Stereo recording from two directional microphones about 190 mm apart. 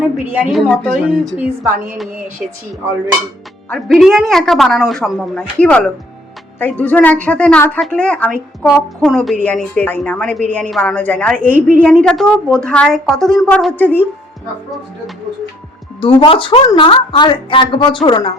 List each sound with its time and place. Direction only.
0.4 s a woman's voice: centre (ahead or behind)
1.2 s a woman's voice: 15° right (ahead or behind)
3.7 s a woman's voice: centre (ahead or behind)
16.0 s a woman's voice: 30° left (ahead or behind)